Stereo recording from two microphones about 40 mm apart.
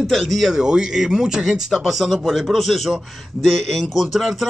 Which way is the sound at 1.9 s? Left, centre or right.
Centre.